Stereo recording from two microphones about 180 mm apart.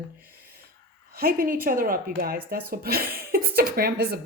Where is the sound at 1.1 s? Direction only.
55° right (ahead or behind).